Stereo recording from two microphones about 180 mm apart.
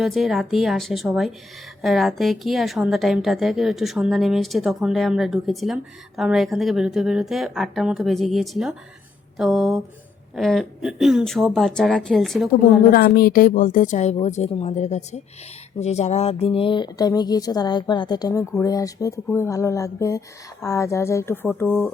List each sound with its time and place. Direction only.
0.0 s a woman's voice: centre (ahead or behind)
12.9 s a woman's voice: 55° left (ahead or behind); by 21.9 s 10° left (ahead or behind)